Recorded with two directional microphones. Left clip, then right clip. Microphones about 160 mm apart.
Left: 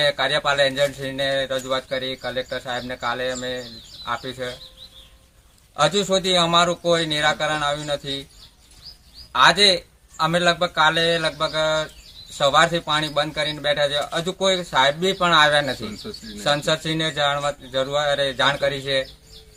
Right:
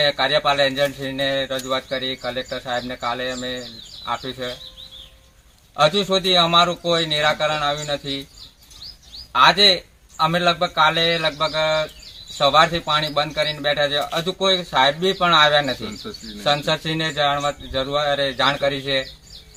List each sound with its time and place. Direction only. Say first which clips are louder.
0.0 s speech: right 2 dB; 5° left (ahead or behind)
5.7 s speech: right 2 dB; 10° left (ahead or behind)
9.3 s speech: right 1 dB; 10° left (ahead or behind)